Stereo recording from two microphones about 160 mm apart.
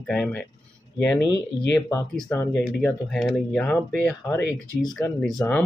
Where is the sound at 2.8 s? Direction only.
5° left (ahead or behind).